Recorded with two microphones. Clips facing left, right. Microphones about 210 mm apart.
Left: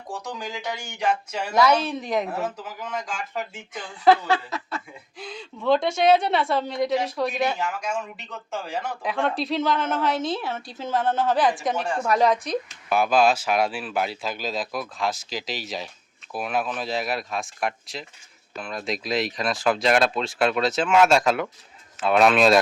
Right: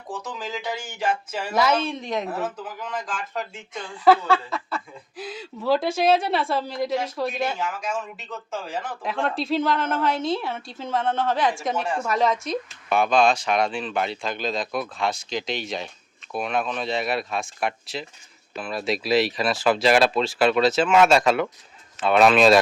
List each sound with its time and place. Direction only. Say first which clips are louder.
0.2 s speech: right 1 dB; 5° right (ahead or behind)
4.3 s a sound: right 2 dB; 30° right (ahead or behind)
5.1 s speech: right 3 dB; 5° right (ahead or behind)